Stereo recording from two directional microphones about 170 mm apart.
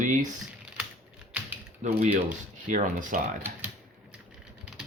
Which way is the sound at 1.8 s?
45° right (ahead or behind).